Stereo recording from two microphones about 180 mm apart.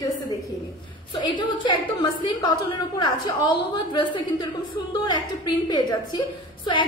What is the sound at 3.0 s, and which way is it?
A woman's voice, 25° left (ahead or behind).